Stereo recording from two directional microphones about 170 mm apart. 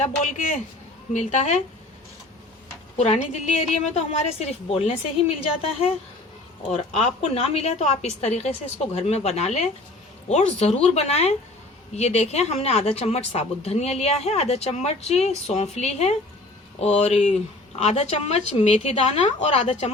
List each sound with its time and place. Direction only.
0.0 s a woman's voice: 45° left (ahead or behind)
3.0 s a woman's voice: 40° left (ahead or behind)
6.9 s speech: 40° left (ahead or behind)